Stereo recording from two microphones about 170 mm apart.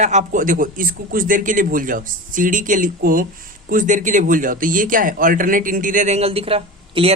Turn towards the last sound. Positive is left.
turn(degrees=-35)  # may be behind; listen again after turning